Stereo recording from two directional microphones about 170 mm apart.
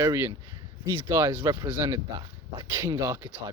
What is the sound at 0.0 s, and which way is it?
Speech, 15° right (ahead or behind).